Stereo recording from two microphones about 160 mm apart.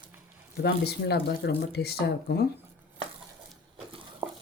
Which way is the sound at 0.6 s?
90° left.